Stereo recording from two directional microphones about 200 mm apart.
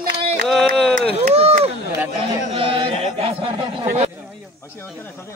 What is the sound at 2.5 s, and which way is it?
A man's voice, 25° right (ahead or behind).